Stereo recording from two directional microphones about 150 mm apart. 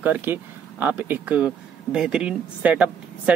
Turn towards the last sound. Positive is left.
turn(degrees=-10)  # may be behind; listen again after turning